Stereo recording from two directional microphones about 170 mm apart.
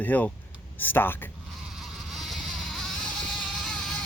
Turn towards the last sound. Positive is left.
turn(degrees=5)  # may be behind; listen again after turning